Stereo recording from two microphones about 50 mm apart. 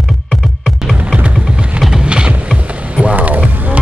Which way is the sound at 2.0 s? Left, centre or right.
Right.